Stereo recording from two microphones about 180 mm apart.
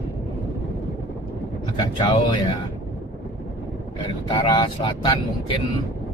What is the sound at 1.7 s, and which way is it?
Speech, 25° left (ahead or behind).